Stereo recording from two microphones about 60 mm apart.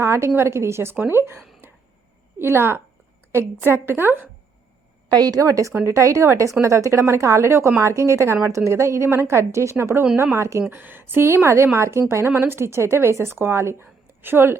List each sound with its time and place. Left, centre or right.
0.0 s a woman's voice: right
1.6 s a sound: right
2.4 s a woman's voice: right
5.2 s a woman's voice: right
10.7 s a woman's voice: right